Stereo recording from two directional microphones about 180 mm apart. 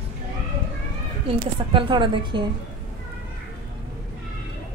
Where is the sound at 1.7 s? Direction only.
30° right (ahead or behind).